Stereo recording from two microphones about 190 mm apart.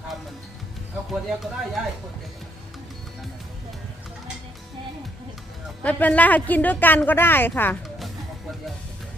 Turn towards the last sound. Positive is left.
turn(degrees=10)  # may be behind; listen again after turning